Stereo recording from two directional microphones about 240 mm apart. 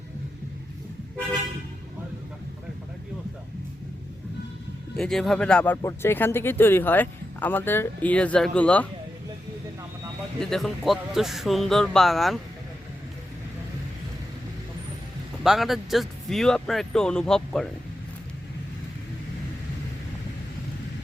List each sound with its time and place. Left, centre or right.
4.9 s speech: centre
10.4 s speech: centre
15.4 s speech: centre